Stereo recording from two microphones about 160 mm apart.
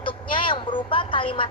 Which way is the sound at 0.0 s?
30° left (ahead or behind).